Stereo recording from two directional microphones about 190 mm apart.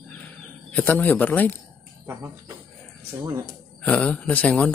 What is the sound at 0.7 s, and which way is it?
Speech, 10° left (ahead or behind).